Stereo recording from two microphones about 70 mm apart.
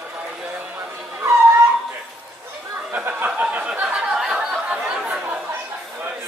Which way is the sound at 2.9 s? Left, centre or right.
Right.